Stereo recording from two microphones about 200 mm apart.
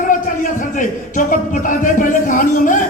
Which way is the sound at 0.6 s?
40° left (ahead or behind).